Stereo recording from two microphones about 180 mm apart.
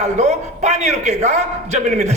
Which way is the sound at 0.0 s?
40° right (ahead or behind).